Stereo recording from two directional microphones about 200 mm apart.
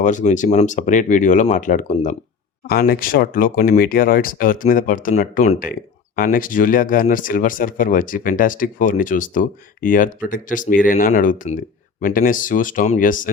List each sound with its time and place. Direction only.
0.0 s speech: 40° left (ahead or behind)